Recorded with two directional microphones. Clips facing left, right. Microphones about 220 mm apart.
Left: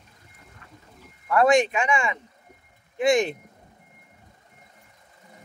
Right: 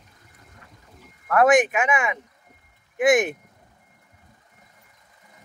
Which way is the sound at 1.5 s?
20° right (ahead or behind).